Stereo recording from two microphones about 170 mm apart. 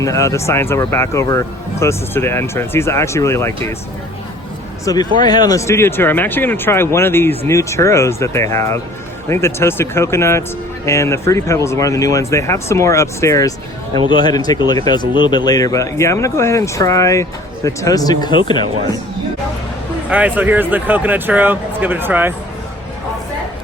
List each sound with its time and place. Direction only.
0.0 s speech: 20° left (ahead or behind)
4.9 s speech: 20° left (ahead or behind)
20.1 s speech: 10° right (ahead or behind)